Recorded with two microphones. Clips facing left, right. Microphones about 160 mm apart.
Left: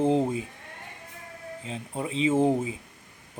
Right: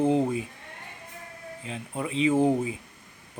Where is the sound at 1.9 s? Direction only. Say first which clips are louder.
Right 1 dB; 30° left (ahead or behind).